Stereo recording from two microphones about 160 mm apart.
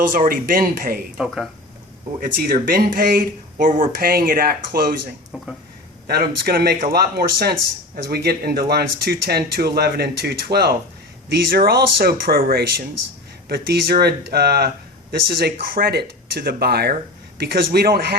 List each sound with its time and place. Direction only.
0.1 s speech: 60° right (ahead or behind)
2.4 s speech: 65° right (ahead or behind)
5.3 s speech: 5° right (ahead or behind)
6.1 s speech: 75° right (ahead or behind); by 10.8 s 90° right
11.3 s speech: 75° right (ahead or behind)